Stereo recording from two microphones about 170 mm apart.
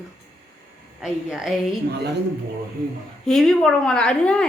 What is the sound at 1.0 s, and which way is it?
Speech, 5° right (ahead or behind).